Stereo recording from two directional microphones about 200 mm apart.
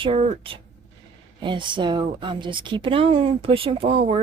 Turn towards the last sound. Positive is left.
turn(degrees=-30)  # may be behind; listen again after turning